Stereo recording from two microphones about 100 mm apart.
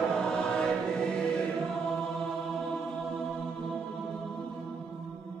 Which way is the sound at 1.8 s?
5° left (ahead or behind).